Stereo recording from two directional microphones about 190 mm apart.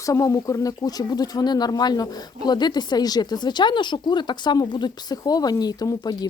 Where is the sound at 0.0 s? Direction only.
15° left (ahead or behind).